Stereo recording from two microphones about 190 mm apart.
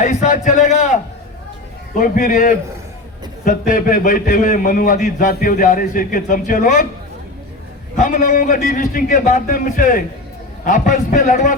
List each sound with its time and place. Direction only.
0.0 s a sound: 40° left (ahead or behind)
2.0 s a man's voice: 45° left (ahead or behind)
7.9 s a man's voice: 45° left (ahead or behind)